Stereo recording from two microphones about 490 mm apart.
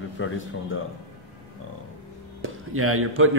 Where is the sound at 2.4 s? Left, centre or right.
Right.